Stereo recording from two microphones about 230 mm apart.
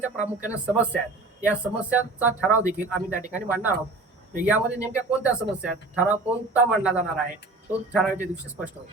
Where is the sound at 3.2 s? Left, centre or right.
Centre.